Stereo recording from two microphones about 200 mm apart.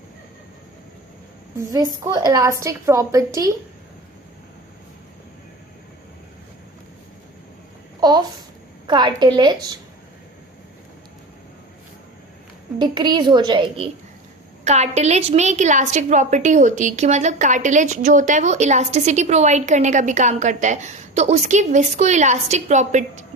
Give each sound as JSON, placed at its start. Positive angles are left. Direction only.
{"t": 1.5, "sound": "a woman's voice", "side_deg": -15}
{"t": 8.0, "sound": "a child's voice", "side_deg": -20}
{"t": 12.8, "sound": "a woman's voice", "side_deg": -20}